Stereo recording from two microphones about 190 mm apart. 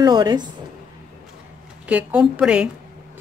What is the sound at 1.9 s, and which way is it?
Speech, 5° right (ahead or behind).